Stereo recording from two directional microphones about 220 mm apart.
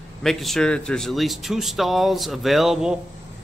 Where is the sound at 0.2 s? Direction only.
Centre (ahead or behind).